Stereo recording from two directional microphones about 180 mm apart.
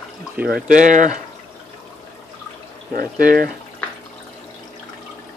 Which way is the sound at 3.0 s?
50° right (ahead or behind).